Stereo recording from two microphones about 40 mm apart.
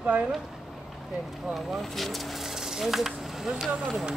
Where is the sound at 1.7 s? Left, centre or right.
Centre.